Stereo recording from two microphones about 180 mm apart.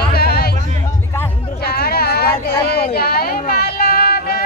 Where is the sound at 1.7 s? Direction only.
60° left (ahead or behind).